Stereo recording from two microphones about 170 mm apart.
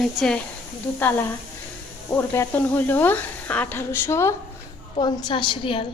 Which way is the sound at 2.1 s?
15° left (ahead or behind).